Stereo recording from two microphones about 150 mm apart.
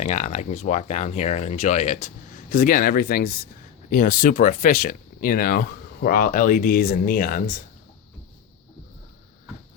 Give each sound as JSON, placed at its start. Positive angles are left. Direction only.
{"t": 0.0, "sound": "speech", "side_deg": 50}
{"t": 3.8, "sound": "speech", "side_deg": 65}